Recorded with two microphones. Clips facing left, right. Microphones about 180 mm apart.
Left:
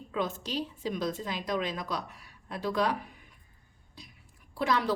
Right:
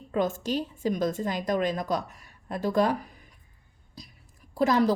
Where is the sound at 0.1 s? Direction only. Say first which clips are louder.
Right 6 dB; 45° right (ahead or behind).